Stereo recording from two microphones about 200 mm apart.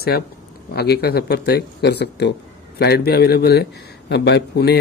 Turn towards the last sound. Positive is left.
turn(degrees=55)  # may be behind; listen again after turning